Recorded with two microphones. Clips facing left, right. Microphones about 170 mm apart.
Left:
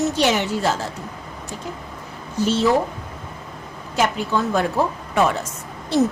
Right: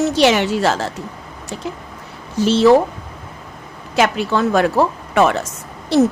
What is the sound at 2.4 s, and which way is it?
Speech, 90° right.